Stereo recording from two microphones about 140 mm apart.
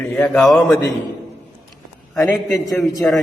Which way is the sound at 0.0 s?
5° left (ahead or behind).